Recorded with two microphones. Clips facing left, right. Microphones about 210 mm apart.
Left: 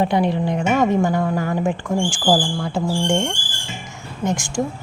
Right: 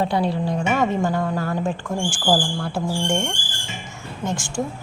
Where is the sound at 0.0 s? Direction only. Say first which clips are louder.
Left 3 dB; 15° left (ahead or behind).